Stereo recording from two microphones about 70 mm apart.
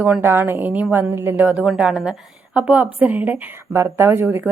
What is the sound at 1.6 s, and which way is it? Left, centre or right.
A woman's voice, centre.